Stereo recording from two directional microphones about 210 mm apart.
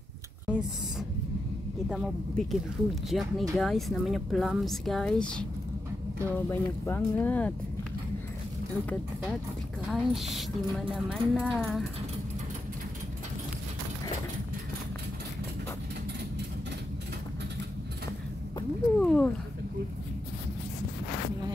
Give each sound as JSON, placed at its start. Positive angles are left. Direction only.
{"t": 0.5, "sound": "speech", "side_deg": -5}
{"t": 6.5, "sound": "speech", "side_deg": 10}
{"t": 9.8, "sound": "speech", "side_deg": 0}
{"t": 18.9, "sound": "a sound", "side_deg": 5}